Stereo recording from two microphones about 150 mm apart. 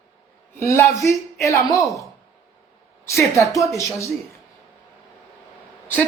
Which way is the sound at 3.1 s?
20° left (ahead or behind).